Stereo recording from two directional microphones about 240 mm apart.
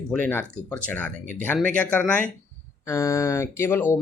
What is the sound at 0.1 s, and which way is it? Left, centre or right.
Speech, centre.